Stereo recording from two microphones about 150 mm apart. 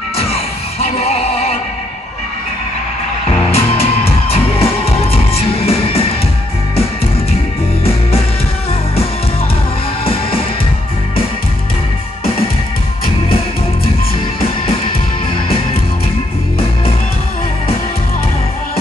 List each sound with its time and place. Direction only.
0.2 s music: 40° left (ahead or behind)
3.5 s music: 40° left (ahead or behind)